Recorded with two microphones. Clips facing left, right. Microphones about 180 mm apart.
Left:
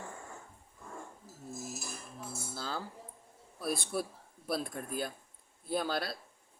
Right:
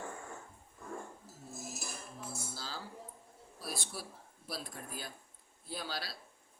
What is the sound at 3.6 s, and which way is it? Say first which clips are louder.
Speech: left 9 dB; 55° left (ahead or behind).